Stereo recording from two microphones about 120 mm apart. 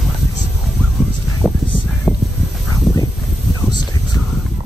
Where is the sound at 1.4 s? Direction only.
10° right (ahead or behind).